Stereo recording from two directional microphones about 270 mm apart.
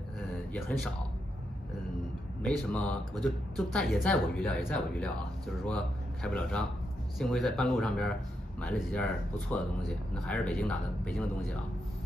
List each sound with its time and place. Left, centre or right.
0.5 s speech: centre
2.4 s a man's voice: centre